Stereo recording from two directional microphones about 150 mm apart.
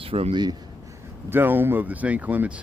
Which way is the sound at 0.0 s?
40° right (ahead or behind).